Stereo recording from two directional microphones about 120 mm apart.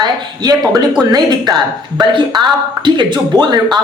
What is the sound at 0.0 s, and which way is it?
Speech, 35° right (ahead or behind).